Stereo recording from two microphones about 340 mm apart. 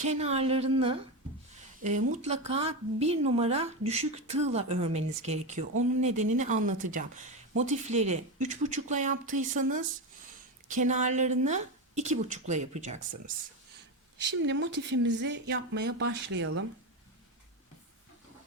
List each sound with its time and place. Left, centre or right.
0.1 s a woman's voice: centre
14.4 s speech: right